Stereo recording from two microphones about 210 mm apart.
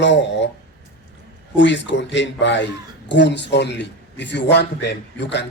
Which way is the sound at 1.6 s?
60° left (ahead or behind).